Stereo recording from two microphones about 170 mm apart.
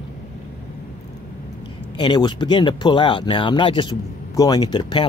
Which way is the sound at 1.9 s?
25° left (ahead or behind).